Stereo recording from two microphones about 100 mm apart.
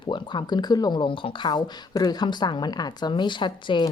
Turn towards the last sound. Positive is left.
turn(degrees=55)  # may be behind; listen again after turning